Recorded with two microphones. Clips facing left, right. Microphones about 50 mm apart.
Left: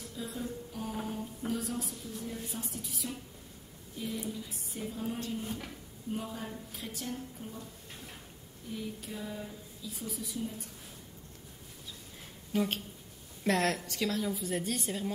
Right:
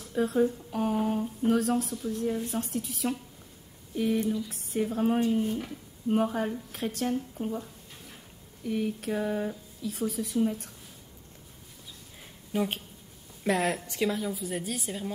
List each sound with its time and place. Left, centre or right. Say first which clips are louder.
0.1 s speech: right 14 dB; right
8.6 s speech: right 10 dB; right
12.5 s speech: right 2 dB; centre
13.8 s speech: right 5 dB; right
14.1 s a woman's voice: right 1 dB; centre